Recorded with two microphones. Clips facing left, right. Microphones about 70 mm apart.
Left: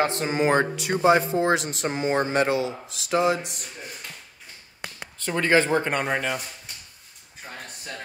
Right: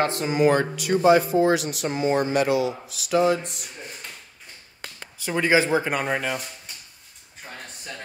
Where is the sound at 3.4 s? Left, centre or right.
Centre.